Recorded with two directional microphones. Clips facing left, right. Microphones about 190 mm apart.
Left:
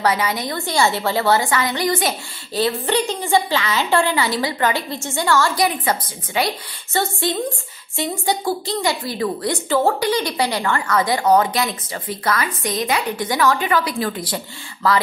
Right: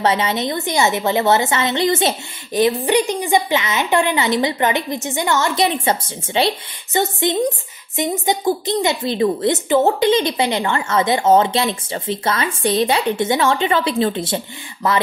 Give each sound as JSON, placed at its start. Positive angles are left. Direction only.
{"t": 0.0, "sound": "a woman's voice", "side_deg": -25}